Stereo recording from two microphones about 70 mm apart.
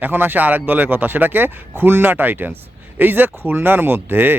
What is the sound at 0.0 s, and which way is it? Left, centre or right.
A man's voice, right.